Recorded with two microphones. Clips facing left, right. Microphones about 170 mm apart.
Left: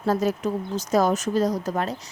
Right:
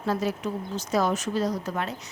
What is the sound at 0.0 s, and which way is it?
A woman's voice, 45° left (ahead or behind).